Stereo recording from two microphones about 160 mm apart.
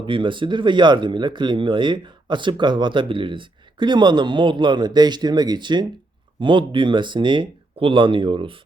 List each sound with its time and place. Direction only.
0.0 s speech: 30° right (ahead or behind)